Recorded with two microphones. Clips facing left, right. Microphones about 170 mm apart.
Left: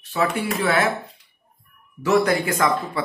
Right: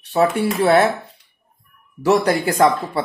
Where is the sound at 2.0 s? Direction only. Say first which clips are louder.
Right 2 dB; 35° right (ahead or behind).